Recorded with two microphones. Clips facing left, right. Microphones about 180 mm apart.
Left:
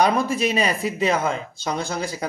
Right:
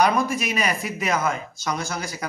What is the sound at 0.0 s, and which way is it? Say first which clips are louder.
Speech: left 1 dB; 30° left (ahead or behind).